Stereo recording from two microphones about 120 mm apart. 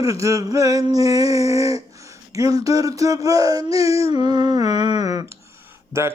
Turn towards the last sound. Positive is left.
turn(degrees=-20)  # may be behind; listen again after turning